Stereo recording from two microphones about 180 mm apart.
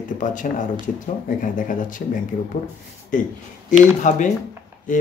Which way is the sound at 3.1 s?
45° left (ahead or behind).